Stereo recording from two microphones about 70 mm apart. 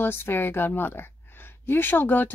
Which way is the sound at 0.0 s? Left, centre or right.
Left.